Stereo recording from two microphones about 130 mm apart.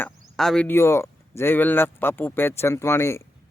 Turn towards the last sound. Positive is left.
turn(degrees=20)  # may be behind; listen again after turning